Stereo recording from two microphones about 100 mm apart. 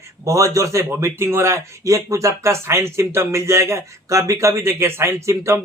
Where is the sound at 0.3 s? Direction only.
30° right (ahead or behind).